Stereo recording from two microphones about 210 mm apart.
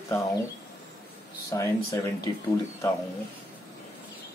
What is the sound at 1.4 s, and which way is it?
Speech, 15° left (ahead or behind).